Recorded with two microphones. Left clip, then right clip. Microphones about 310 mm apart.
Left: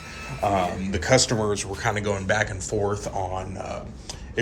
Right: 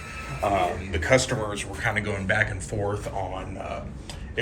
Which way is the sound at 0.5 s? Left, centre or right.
Left.